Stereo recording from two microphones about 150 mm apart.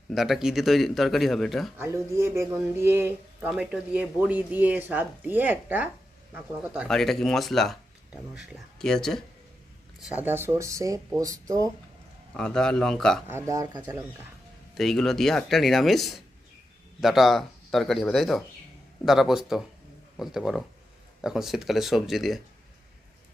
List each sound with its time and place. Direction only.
0.1 s speech: centre (ahead or behind)
1.8 s speech: 15° right (ahead or behind)
6.8 s speech: 5° left (ahead or behind)
10.0 s speech: 10° right (ahead or behind)
12.4 s speech: 5° left (ahead or behind)
13.2 s speech: 20° right (ahead or behind)
14.8 s speech: centre (ahead or behind)